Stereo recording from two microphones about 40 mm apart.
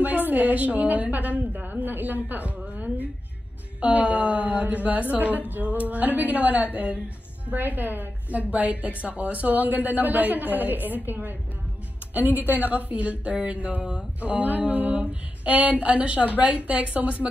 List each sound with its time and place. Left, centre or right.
0.0 s a woman's voice: right
3.8 s a woman's voice: right
8.4 s a woman's voice: right
13.7 s a sound: right
14.2 s a woman's voice: right
15.4 s a woman's voice: right